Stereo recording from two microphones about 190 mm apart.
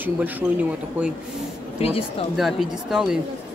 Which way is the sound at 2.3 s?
Centre (ahead or behind).